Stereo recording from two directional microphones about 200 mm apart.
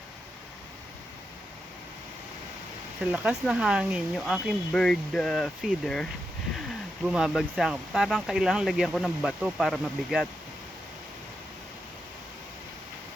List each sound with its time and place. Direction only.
3.0 s speech: 5° right (ahead or behind)